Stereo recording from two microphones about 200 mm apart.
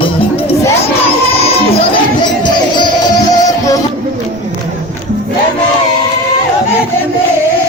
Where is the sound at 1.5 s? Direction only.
30° left (ahead or behind).